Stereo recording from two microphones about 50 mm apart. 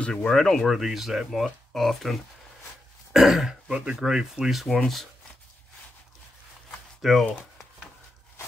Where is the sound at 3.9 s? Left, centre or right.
Centre.